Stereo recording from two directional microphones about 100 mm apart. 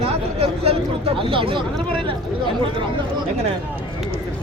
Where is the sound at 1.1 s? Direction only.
60° right (ahead or behind).